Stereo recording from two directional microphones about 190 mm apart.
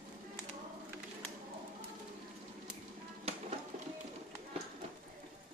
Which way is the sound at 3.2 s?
30° right (ahead or behind).